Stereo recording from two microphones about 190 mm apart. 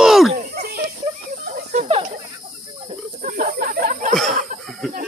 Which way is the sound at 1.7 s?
35° right (ahead or behind).